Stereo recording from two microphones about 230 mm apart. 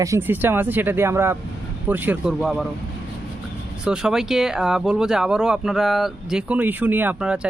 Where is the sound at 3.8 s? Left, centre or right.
Centre.